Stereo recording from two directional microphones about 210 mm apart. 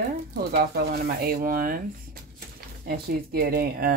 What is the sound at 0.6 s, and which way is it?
Speech, 45° right (ahead or behind).